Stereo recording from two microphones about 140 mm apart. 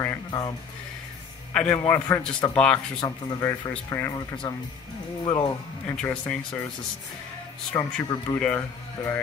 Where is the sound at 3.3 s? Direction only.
25° left (ahead or behind).